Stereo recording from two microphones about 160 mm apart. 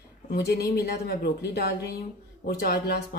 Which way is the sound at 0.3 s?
85° left.